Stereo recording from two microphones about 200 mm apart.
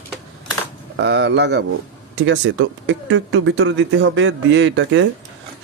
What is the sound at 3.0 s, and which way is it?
Speech, 70° right (ahead or behind).